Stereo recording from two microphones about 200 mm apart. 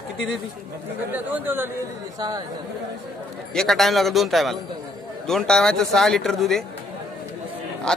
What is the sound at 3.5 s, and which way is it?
Speech, centre (ahead or behind).